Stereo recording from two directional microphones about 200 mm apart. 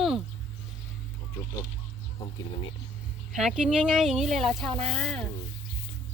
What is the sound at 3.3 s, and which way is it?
Speech, centre (ahead or behind).